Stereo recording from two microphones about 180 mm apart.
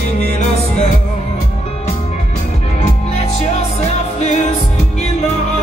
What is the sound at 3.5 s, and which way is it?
Music, 40° left (ahead or behind).